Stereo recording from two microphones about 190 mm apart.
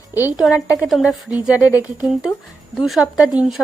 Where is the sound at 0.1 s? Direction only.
10° right (ahead or behind).